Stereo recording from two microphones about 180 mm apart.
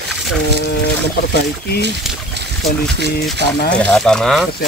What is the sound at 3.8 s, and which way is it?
Speech, 5° left (ahead or behind).